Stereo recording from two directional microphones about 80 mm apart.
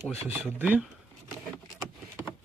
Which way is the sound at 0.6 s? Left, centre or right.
Right.